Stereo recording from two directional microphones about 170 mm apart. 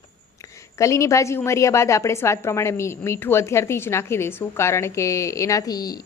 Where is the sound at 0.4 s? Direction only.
20° left (ahead or behind).